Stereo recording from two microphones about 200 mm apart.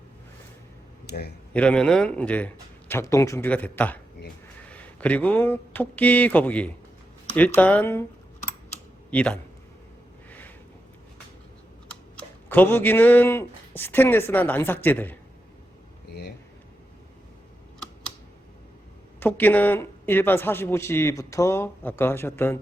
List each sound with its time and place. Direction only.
1.0 s speech: 50° left (ahead or behind)
1.5 s a man's voice: 5° left (ahead or behind)
9.0 s speech: 5° left (ahead or behind)
10.2 s a sound: 10° left (ahead or behind)
12.5 s speech: 10° left (ahead or behind)
19.2 s speech: 10° left (ahead or behind)